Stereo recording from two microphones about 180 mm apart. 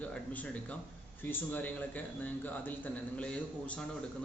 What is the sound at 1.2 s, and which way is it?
A man's voice, 10° left (ahead or behind).